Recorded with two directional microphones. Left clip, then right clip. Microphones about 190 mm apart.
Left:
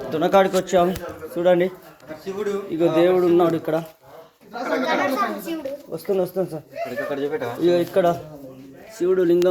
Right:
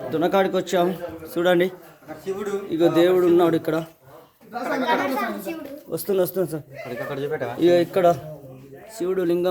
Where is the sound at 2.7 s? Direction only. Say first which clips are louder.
Even; 20° right (ahead or behind).